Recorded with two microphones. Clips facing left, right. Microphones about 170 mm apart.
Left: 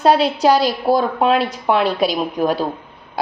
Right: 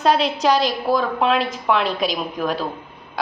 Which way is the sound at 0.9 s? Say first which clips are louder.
Left 4 dB; 35° left (ahead or behind).